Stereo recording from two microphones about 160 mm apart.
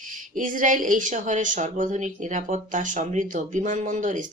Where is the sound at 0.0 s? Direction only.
55° right (ahead or behind).